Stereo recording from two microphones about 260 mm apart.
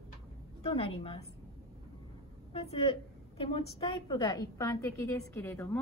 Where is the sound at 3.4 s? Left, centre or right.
Left.